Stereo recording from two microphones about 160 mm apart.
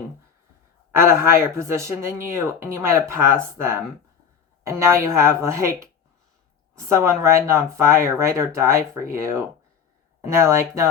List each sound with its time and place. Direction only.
0.9 s speech: 15° right (ahead or behind)